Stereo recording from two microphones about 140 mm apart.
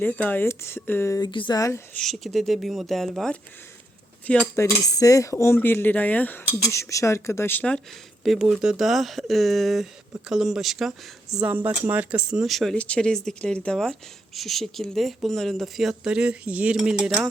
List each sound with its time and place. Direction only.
0.0 s speech: 10° left (ahead or behind)
1.3 s speech: 35° left (ahead or behind)
1.9 s speech: 5° left (ahead or behind)
4.5 s speech: 20° left (ahead or behind)
8.2 s speech: centre (ahead or behind)